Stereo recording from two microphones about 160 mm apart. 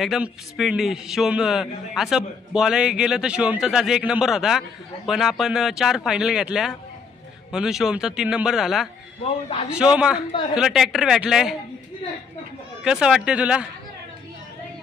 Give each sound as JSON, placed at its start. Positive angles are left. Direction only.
{"t": 0.0, "sound": "a man's voice", "side_deg": 0}
{"t": 9.2, "sound": "a man's voice", "side_deg": 35}
{"t": 9.7, "sound": "a man's voice", "side_deg": -5}
{"t": 12.8, "sound": "a man's voice", "side_deg": -5}